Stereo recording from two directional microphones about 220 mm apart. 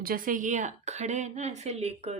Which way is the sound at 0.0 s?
40° right (ahead or behind).